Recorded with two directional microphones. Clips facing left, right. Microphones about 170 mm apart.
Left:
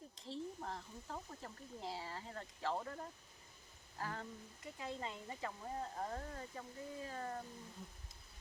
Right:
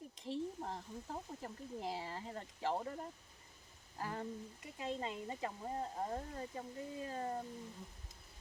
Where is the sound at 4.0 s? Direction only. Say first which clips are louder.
Right 3 dB; 15° right (ahead or behind).